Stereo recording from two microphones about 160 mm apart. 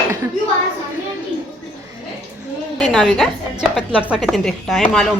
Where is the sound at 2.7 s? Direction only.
5° left (ahead or behind).